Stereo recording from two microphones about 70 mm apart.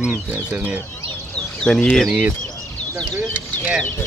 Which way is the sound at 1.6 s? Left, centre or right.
Centre.